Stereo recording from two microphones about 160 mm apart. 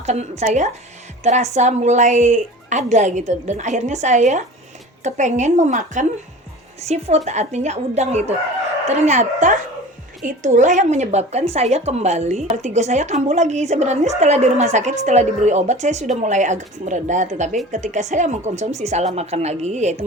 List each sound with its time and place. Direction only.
0.0 s speech: 45° right (ahead or behind)